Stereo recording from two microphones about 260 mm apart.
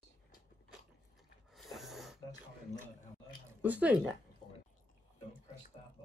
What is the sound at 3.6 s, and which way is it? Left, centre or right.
Speech, centre.